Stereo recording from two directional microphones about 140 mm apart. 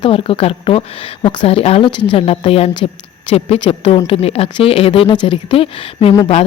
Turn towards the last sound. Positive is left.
turn(degrees=40)  # may be behind; listen again after turning